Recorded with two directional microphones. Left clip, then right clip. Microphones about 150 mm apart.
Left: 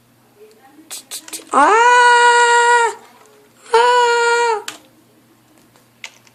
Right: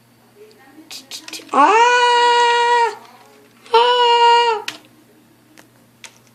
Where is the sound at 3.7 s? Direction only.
25° left (ahead or behind).